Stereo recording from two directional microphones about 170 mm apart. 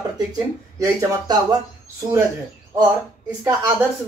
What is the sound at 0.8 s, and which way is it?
Speech, 20° right (ahead or behind).